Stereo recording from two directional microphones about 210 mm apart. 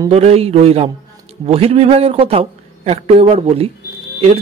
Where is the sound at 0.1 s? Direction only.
30° right (ahead or behind).